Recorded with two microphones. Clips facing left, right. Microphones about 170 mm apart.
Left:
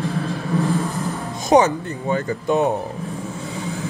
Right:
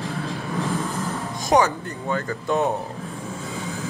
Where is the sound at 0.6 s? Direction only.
20° left (ahead or behind).